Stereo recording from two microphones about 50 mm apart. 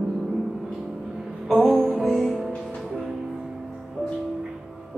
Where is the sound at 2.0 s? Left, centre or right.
Centre.